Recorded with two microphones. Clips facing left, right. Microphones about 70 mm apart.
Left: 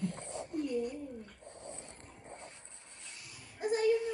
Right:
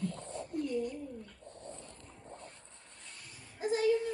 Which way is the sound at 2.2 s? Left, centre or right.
Left.